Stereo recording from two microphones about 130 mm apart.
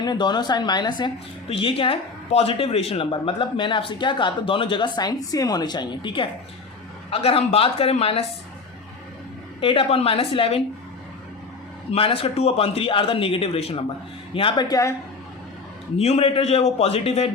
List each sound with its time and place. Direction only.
0.0 s a woman's voice: 35° left (ahead or behind)
7.1 s a man's voice: 50° left (ahead or behind)
9.6 s a man's voice: 45° left (ahead or behind)
11.9 s a man's voice: 45° left (ahead or behind)
14.3 s a woman's voice: 40° left (ahead or behind)
16.0 s a man's voice: 50° left (ahead or behind)